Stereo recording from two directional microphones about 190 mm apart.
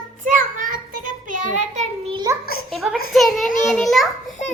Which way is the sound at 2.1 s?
20° right (ahead or behind).